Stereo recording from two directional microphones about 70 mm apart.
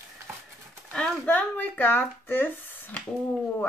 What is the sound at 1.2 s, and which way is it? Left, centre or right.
Speech, left.